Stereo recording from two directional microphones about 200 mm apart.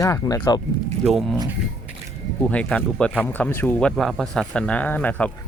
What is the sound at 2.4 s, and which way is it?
Speech, 5° left (ahead or behind).